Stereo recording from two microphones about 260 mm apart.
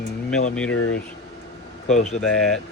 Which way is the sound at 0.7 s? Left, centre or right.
Left.